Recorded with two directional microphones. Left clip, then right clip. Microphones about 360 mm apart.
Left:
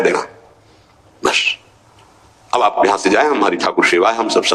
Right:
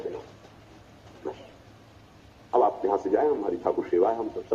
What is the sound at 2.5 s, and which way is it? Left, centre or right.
A man's voice, left.